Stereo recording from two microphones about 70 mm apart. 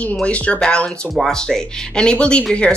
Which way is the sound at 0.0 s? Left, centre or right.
Centre.